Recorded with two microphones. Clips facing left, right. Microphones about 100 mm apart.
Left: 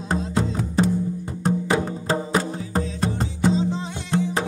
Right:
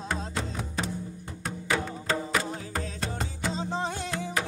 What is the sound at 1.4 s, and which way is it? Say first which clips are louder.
Music: left 8 dB; 35° left (ahead or behind).